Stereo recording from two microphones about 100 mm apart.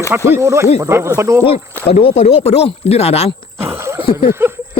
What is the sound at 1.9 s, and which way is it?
Speech, 85° left.